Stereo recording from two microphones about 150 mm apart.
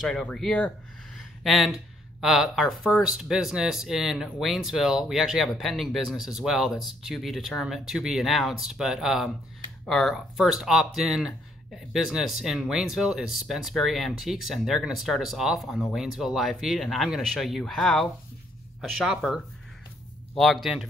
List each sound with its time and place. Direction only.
0.0 s speech: 5° left (ahead or behind)
1.1 s a sound: centre (ahead or behind)
2.2 s speech: centre (ahead or behind)